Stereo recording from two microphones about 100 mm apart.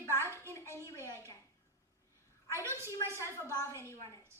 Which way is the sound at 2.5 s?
30° right (ahead or behind).